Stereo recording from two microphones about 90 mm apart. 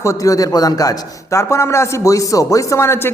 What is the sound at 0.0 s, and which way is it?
Speech, 35° left (ahead or behind).